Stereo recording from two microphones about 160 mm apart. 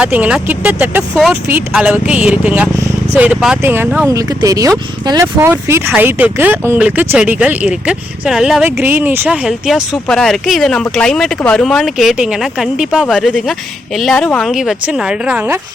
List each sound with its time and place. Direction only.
0.0 s speech: 10° right (ahead or behind)